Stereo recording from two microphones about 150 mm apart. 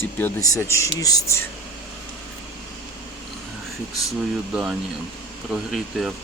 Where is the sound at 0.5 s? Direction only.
20° left (ahead or behind).